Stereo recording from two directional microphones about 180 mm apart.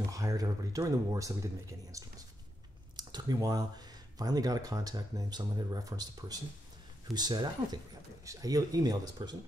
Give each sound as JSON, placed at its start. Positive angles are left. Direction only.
{"t": 0.1, "sound": "speech", "side_deg": -20}